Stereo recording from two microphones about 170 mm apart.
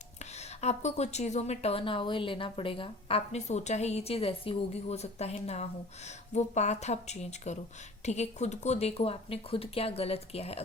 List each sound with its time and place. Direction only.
0.3 s a woman's voice: 40° left (ahead or behind)
6.3 s a woman's voice: 45° left (ahead or behind)